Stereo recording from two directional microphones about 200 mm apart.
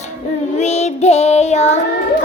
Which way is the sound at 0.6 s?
35° left (ahead or behind).